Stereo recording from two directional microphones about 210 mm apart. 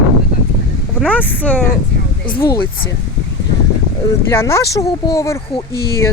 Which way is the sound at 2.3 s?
25° left (ahead or behind).